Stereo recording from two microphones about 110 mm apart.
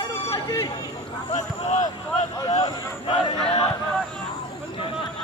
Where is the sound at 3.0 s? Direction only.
65° left (ahead or behind).